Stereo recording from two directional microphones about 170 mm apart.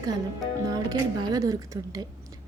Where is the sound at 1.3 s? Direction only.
20° right (ahead or behind).